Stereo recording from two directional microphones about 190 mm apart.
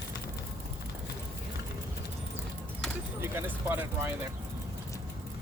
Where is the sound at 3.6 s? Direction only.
10° right (ahead or behind).